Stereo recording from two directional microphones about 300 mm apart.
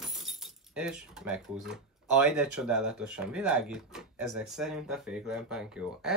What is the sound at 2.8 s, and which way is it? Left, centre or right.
Speech, right.